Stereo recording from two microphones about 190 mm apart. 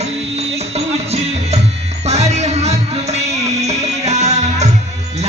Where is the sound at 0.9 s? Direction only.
35° right (ahead or behind).